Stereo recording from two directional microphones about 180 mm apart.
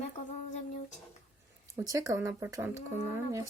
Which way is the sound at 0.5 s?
40° left (ahead or behind).